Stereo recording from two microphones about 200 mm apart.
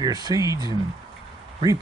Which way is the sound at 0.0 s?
20° right (ahead or behind).